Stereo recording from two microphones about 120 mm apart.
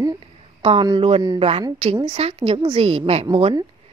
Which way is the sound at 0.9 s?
55° right (ahead or behind).